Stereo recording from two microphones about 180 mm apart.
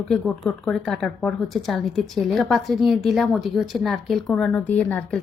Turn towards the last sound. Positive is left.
turn(degrees=10)  # may be behind; listen again after turning